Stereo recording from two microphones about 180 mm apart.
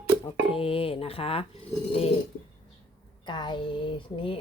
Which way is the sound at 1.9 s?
35° left (ahead or behind).